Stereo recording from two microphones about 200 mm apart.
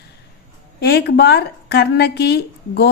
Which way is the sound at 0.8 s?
55° left (ahead or behind).